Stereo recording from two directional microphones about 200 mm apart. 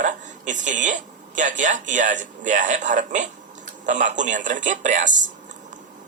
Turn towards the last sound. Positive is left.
turn(degrees=-40)  # may be behind; listen again after turning